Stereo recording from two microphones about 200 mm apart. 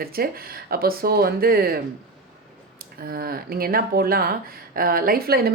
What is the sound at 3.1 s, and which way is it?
Speech, 50° right (ahead or behind).